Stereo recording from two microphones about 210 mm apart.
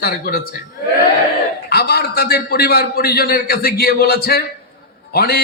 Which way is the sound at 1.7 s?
50° left (ahead or behind).